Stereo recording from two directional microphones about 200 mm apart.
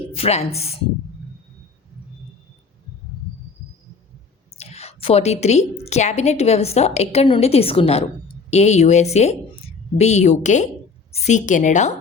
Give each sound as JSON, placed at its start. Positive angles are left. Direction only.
{"t": 0.2, "sound": "a woman's voice", "side_deg": 30}
{"t": 4.5, "sound": "a woman's voice", "side_deg": 30}